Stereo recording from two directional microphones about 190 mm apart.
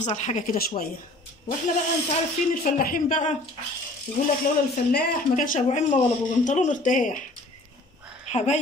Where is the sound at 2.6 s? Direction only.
45° left (ahead or behind).